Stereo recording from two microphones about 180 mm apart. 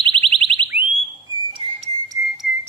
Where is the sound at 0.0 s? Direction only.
30° right (ahead or behind).